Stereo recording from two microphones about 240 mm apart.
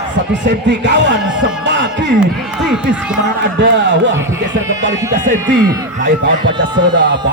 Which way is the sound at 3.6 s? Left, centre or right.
Right.